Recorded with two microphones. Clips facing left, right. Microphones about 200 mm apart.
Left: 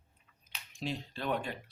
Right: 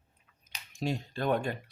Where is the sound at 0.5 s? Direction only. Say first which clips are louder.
Right 5 dB; 45° right (ahead or behind).